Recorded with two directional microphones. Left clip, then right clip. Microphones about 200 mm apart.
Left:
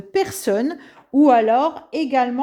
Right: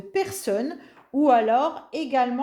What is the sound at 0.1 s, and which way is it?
Speech, 35° left (ahead or behind).